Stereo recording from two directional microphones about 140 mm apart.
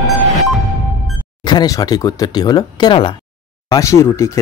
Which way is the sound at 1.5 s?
25° left (ahead or behind).